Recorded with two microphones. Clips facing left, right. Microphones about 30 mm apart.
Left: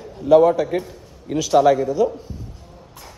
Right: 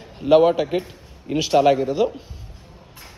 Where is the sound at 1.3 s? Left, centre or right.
Right.